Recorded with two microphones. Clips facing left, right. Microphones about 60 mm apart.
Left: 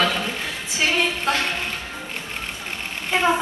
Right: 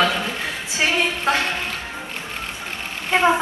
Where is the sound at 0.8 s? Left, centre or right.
Centre.